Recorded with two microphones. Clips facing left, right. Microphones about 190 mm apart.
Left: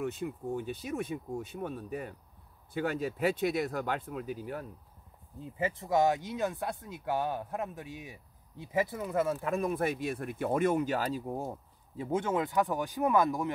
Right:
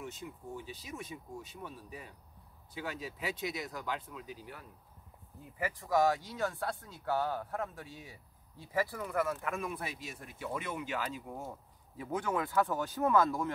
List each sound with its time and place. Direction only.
0.0 s speech: 55° left (ahead or behind)
5.4 s speech: 25° left (ahead or behind)